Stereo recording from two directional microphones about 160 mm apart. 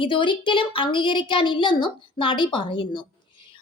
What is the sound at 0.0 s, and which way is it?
Speech, 30° left (ahead or behind).